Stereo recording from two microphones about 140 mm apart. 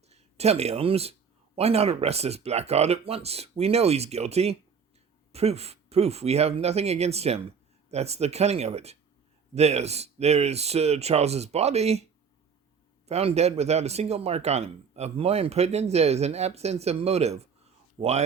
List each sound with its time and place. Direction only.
0.1 s speech: 50° right (ahead or behind)
13.1 s speech: 50° right (ahead or behind)